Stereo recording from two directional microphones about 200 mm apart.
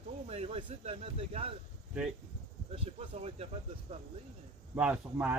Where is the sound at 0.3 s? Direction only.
30° right (ahead or behind).